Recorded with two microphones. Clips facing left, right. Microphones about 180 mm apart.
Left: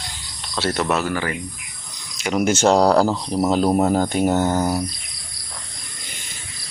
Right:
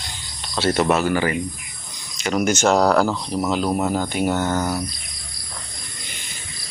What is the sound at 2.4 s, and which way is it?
Speech, 30° left (ahead or behind).